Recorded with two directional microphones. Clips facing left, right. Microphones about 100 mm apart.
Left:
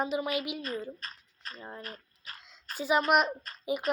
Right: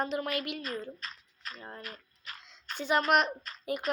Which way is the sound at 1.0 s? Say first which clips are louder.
Even; 35° left (ahead or behind).